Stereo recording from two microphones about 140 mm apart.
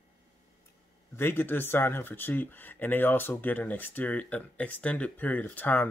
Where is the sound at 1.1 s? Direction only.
15° left (ahead or behind).